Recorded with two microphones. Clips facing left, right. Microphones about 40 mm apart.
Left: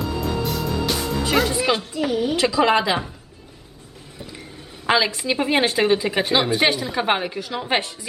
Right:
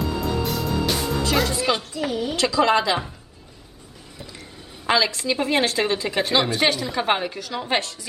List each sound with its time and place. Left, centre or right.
0.0 s music: centre
1.4 s a woman's voice: centre
4.2 s vehicle: centre
4.9 s a woman's voice: centre